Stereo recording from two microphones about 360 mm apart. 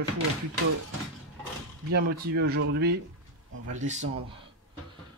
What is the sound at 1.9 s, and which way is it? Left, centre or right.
Speech, right.